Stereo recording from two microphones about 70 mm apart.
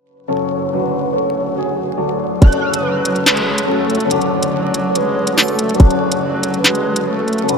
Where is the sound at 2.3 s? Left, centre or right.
Centre.